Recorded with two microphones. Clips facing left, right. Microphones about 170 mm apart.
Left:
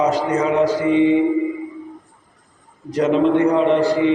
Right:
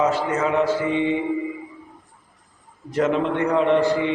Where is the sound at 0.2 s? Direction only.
35° left (ahead or behind).